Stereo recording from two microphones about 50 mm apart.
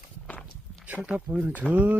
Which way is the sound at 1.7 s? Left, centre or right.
Right.